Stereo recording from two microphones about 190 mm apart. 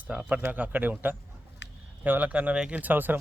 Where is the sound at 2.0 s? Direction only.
10° right (ahead or behind).